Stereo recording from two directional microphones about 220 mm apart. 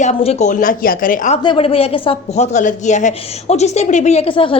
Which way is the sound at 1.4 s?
25° left (ahead or behind).